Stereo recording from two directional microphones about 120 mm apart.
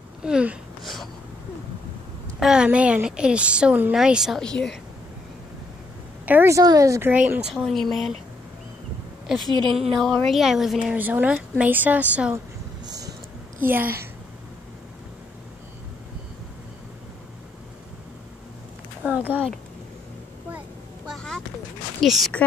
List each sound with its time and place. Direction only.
0.2 s speech: 10° right (ahead or behind)
2.4 s speech: 5° right (ahead or behind)
4.4 s speech: 5° left (ahead or behind)
6.2 s a woman's voice: 15° right (ahead or behind)
6.5 s speech: 30° right (ahead or behind)
7.1 s speech: 15° right (ahead or behind)
7.5 s speech: centre (ahead or behind)
9.4 s a woman's voice: 40° right (ahead or behind)
9.9 s speech: centre (ahead or behind)
13.7 s speech: 15° right (ahead or behind)
19.0 s speech: 10° right (ahead or behind)
22.0 s speech: centre (ahead or behind)